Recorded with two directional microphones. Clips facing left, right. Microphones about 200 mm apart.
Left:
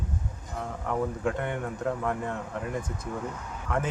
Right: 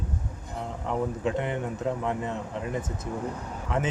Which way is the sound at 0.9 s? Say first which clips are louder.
Right 1 dB; 25° right (ahead or behind).